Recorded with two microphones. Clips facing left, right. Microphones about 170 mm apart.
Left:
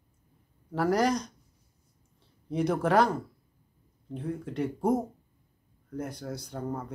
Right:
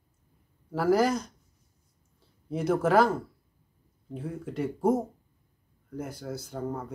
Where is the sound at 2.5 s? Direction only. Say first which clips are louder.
Right 1 dB; 5° right (ahead or behind).